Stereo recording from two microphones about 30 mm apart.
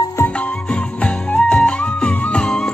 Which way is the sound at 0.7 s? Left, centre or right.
Left.